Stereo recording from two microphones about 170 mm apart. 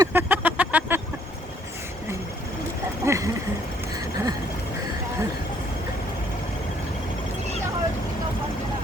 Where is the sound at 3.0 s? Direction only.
15° right (ahead or behind).